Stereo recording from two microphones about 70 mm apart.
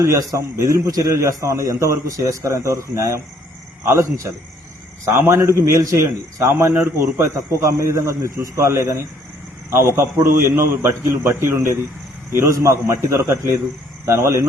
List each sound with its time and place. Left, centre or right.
0.0 s a man's voice: right
6.5 s a man's voice: right
7.0 s a man's voice: right
12.5 s a man's voice: right